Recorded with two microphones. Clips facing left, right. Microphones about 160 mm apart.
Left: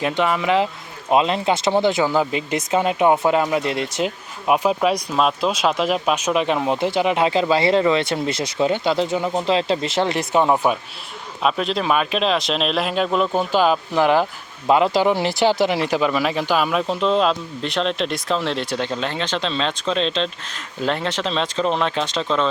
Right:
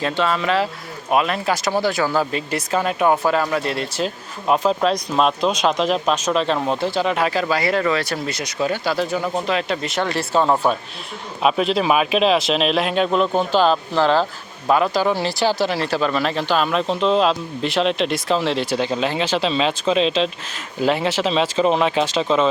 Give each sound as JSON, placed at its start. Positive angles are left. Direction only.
{"t": 0.0, "sound": "speech", "side_deg": 15}
{"t": 11.4, "sound": "speech", "side_deg": -5}